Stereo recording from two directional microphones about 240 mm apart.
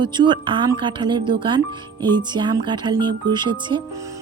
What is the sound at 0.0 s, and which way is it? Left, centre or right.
A woman's voice, centre.